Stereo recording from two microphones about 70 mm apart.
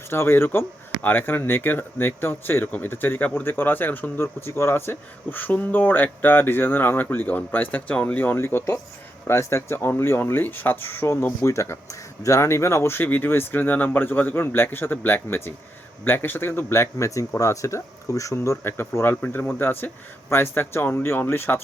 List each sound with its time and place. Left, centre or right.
0.1 s speech: left
18.6 s speech: left